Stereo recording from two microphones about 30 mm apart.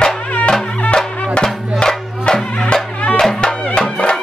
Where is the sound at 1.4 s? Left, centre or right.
Left.